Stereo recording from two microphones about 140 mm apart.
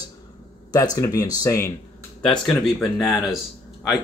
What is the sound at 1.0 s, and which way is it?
Speech, 25° left (ahead or behind).